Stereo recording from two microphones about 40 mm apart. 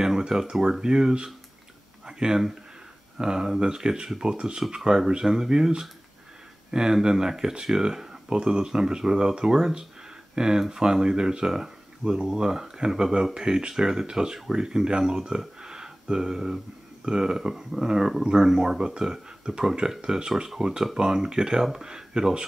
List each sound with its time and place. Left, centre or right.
0.2 s speech: centre
6.7 s speech: centre